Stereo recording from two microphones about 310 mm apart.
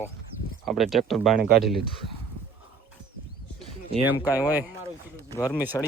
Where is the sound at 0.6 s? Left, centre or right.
Centre.